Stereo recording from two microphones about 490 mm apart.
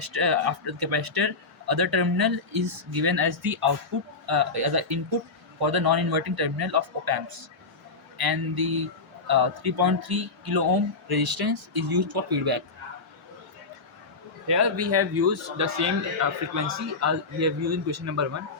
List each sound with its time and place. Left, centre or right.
0.0 s a man's voice: right
8.2 s speech: right
14.4 s a man's voice: right